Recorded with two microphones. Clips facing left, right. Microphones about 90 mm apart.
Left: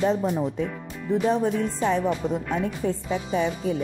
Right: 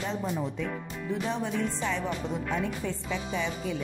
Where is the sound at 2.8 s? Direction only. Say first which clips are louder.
Left 6 dB; 40° left (ahead or behind).